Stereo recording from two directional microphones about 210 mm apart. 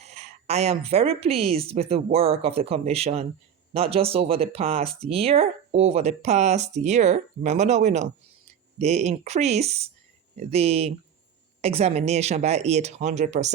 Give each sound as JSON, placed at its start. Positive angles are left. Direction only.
{"t": 0.0, "sound": "speech", "side_deg": -30}